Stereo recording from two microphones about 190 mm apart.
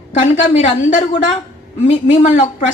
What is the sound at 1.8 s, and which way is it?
Speech, 35° left (ahead or behind).